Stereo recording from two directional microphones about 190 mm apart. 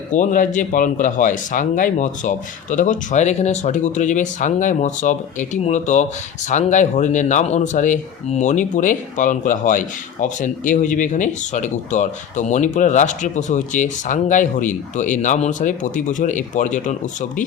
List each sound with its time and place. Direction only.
0.1 s speech: 40° left (ahead or behind)